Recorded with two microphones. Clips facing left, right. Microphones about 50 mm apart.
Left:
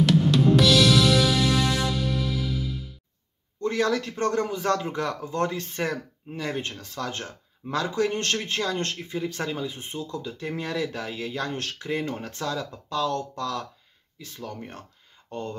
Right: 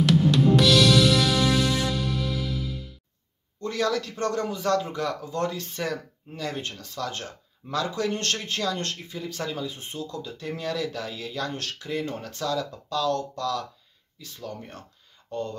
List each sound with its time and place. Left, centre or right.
0.0 s music: centre
3.6 s speech: left